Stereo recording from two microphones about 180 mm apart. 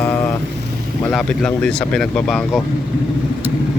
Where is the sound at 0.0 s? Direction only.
15° left (ahead or behind).